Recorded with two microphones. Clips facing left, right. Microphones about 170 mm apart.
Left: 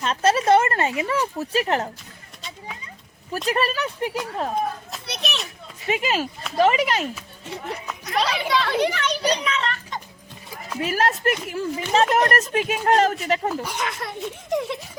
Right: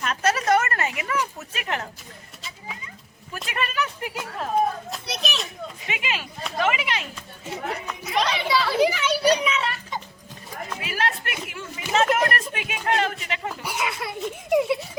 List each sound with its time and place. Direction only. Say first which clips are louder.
0.0 s speech: left 4 dB; 30° left (ahead or behind)
3.3 s speech: left 5 dB; 35° left (ahead or behind)
4.9 s children playing: even; centre (ahead or behind)
5.9 s speech: left 9 dB; 40° left (ahead or behind)
8.0 s a child's voice: left 1 dB; centre (ahead or behind)
10.8 s speech: left 6 dB; 40° left (ahead or behind)
13.6 s speech: left 1 dB; 10° right (ahead or behind)